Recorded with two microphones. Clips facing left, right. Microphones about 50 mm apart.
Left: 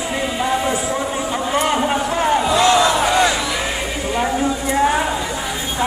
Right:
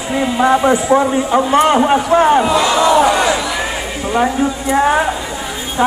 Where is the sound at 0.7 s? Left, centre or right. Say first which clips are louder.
Right 8 dB; right.